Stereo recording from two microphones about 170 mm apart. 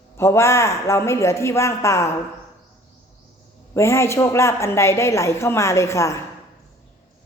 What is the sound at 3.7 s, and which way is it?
A woman's voice, 15° left (ahead or behind).